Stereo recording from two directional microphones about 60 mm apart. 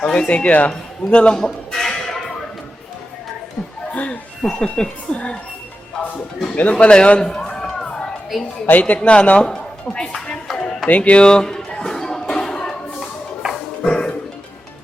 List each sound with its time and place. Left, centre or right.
0.0 s speech: centre
0.7 s a sound: centre
3.9 s music: left
4.4 s speech: centre
6.6 s speech: left
7.9 s a sound: centre
8.6 s speech: left
10.5 s chop: centre
10.8 s a sound: left
13.8 s music: centre